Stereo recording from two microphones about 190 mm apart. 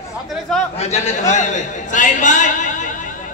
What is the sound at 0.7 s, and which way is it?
A man's voice, 35° left (ahead or behind).